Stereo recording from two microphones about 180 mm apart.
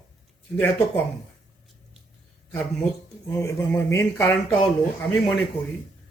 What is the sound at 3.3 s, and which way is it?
Speech, 15° left (ahead or behind).